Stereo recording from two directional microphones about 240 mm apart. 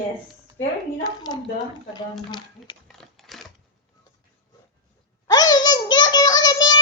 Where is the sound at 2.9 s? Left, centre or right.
Centre.